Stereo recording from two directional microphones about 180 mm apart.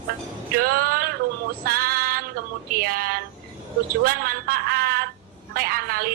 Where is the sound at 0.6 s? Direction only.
55° right (ahead or behind).